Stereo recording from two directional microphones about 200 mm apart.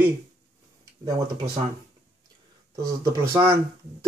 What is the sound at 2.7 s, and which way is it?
Speech, 15° right (ahead or behind).